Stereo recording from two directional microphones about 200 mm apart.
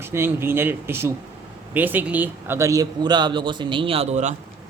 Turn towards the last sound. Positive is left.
turn(degrees=-35)  # may be behind; listen again after turning